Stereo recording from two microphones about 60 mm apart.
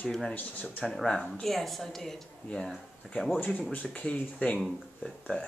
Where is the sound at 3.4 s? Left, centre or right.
Left.